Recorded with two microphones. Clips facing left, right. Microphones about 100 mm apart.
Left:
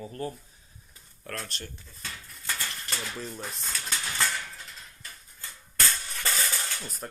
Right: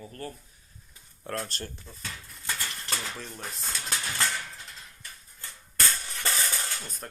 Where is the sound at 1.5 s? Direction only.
40° right (ahead or behind).